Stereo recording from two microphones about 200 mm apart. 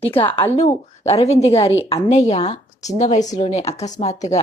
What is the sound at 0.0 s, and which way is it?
Speech, 30° left (ahead or behind).